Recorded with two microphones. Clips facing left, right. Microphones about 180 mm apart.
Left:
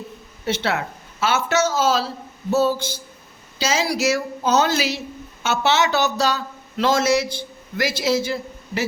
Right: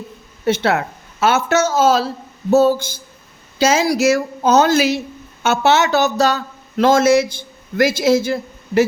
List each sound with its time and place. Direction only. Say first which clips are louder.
0.4 s speech: right 6 dB; 50° right (ahead or behind)